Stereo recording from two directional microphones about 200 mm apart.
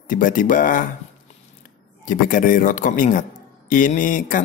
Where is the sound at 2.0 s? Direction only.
45° left (ahead or behind).